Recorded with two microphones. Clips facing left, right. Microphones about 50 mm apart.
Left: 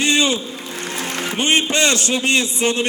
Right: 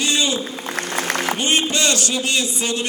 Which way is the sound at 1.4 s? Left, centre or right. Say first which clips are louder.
Left 7 dB; left.